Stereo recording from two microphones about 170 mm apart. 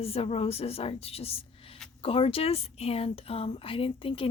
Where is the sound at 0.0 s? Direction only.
35° left (ahead or behind).